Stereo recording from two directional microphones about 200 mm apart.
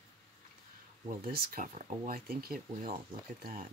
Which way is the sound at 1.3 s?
45° right (ahead or behind).